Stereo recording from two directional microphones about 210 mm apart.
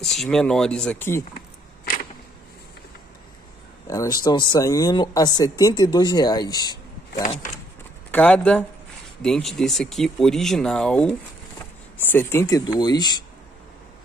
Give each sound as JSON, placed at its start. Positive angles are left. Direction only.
{"t": 0.0, "sound": "speech", "side_deg": 0}
{"t": 3.8, "sound": "speech", "side_deg": 15}
{"t": 8.1, "sound": "speech", "side_deg": 5}